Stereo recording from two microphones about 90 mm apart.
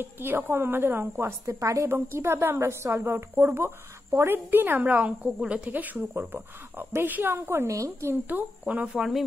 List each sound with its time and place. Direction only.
0.0 s a woman's voice: 25° right (ahead or behind)
8.1 s a woman's voice: 20° right (ahead or behind)
8.8 s speech: 5° right (ahead or behind)